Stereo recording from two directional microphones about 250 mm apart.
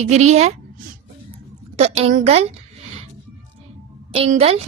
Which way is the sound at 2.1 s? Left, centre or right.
Right.